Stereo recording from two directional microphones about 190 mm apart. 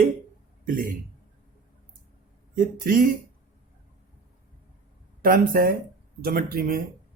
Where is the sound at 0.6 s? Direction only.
45° right (ahead or behind).